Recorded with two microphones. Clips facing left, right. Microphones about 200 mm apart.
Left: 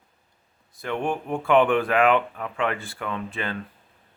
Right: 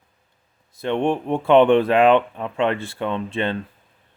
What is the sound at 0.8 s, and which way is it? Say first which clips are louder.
Speech: right 6 dB; 25° right (ahead or behind).